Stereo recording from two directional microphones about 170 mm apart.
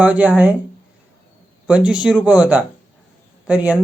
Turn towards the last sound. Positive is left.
turn(degrees=-5)  # may be behind; listen again after turning